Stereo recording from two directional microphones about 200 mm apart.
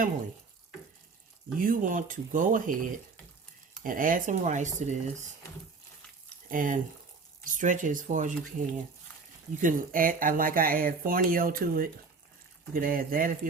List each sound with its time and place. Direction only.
1.5 s speech: 45° right (ahead or behind)
3.8 s speech: 40° right (ahead or behind)
6.5 s speech: 45° right (ahead or behind)